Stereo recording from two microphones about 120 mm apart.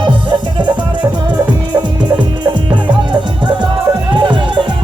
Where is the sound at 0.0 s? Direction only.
40° right (ahead or behind).